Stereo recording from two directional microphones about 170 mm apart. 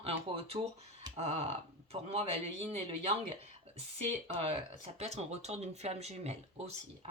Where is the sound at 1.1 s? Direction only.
40° right (ahead or behind).